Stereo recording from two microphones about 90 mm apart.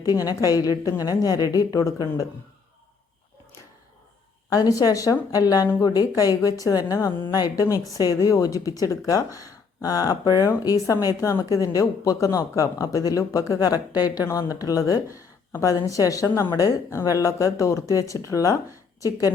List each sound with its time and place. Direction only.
0.0 s a woman's voice: 45° left (ahead or behind)
4.4 s a woman's voice: 45° left (ahead or behind)